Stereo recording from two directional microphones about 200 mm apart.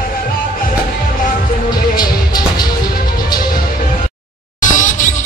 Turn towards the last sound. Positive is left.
turn(degrees=40)  # may be behind; listen again after turning